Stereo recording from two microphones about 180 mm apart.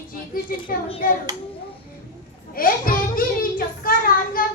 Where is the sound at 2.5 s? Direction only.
50° left (ahead or behind).